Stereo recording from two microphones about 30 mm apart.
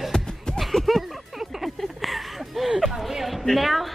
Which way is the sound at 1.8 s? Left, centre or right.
Centre.